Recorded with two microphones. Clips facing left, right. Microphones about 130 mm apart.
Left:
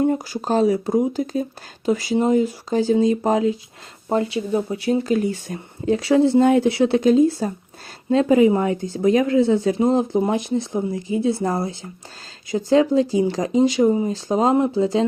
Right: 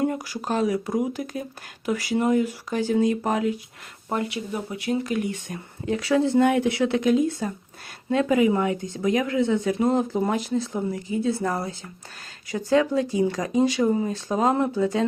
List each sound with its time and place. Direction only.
0.0 s a woman's voice: 30° left (ahead or behind)